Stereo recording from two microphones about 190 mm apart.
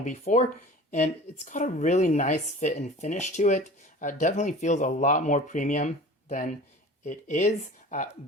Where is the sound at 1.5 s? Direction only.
40° left (ahead or behind).